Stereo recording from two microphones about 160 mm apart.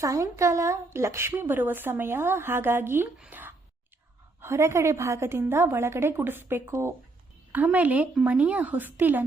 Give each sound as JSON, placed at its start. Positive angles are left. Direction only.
{"t": 0.0, "sound": "a woman's voice", "side_deg": -20}